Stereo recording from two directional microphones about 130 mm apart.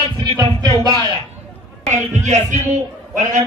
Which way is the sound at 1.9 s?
65° right (ahead or behind).